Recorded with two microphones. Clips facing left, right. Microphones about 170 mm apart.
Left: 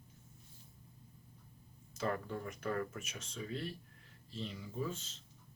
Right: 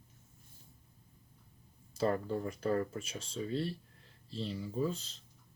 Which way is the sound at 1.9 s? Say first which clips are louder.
Right 6 dB; 35° right (ahead or behind).